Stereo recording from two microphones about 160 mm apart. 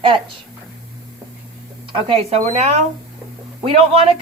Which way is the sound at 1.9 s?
45° right (ahead or behind).